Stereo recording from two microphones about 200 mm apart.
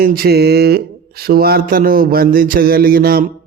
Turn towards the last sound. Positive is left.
turn(degrees=-45)  # may be behind; listen again after turning